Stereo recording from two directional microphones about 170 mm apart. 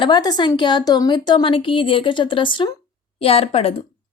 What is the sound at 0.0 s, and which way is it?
Speech, 25° left (ahead or behind).